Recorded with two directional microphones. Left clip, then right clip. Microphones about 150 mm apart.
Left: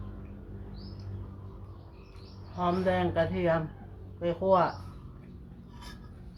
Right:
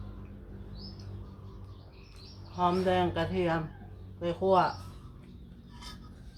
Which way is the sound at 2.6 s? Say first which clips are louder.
Right 1 dB; 15° right (ahead or behind).